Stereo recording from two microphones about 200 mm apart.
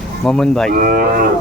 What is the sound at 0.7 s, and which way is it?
Speech, 45° right (ahead or behind).